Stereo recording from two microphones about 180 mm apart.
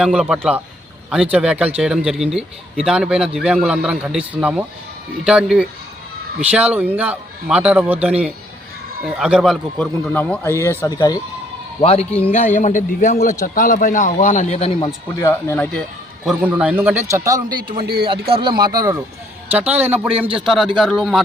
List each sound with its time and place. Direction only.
0.0 s a man's voice: 5° right (ahead or behind); by 11.2 s 20° left (ahead or behind)
11.8 s a man's voice: 35° left (ahead or behind)
15.1 s a man's voice: 15° left (ahead or behind)
16.2 s a man's voice: 5° right (ahead or behind)
19.5 s a man's voice: 10° right (ahead or behind)